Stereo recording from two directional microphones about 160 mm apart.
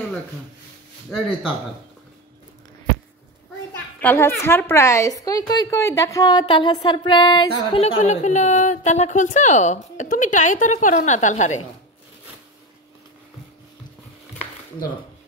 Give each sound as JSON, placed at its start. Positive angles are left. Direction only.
{"t": 4.0, "sound": "a woman's voice", "side_deg": 10}
{"t": 7.8, "sound": "a woman's voice", "side_deg": 45}